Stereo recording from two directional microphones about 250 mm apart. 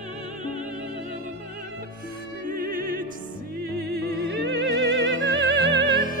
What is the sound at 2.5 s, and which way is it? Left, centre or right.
Music, right.